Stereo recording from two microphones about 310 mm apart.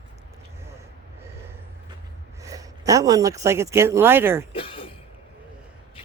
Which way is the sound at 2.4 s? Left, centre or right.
Centre.